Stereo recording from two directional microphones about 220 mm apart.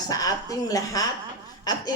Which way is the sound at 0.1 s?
15° left (ahead or behind).